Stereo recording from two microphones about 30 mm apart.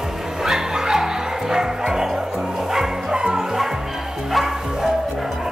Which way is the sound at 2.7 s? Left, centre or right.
Centre.